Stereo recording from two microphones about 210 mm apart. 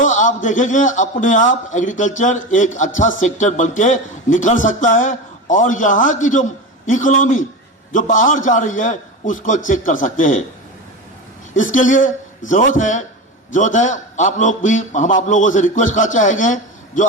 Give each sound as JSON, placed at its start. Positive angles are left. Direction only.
{"t": 0.0, "sound": "a man's voice", "side_deg": 35}
{"t": 11.5, "sound": "a man's voice", "side_deg": 40}